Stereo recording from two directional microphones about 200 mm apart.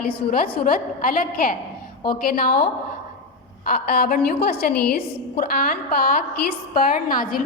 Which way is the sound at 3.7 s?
50° left (ahead or behind).